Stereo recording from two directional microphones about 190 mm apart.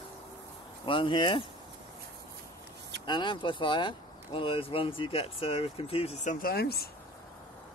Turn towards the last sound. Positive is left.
turn(degrees=55)  # may be behind; listen again after turning